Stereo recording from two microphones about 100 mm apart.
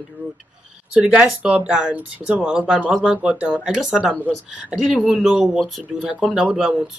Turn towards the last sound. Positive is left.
turn(degrees=-5)  # may be behind; listen again after turning